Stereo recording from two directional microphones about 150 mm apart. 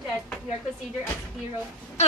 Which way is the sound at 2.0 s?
50° left (ahead or behind).